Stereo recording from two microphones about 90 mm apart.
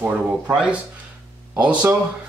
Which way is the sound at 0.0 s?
10° right (ahead or behind).